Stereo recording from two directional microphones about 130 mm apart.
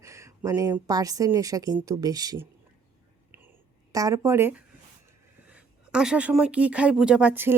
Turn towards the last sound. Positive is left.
turn(degrees=-15)  # may be behind; listen again after turning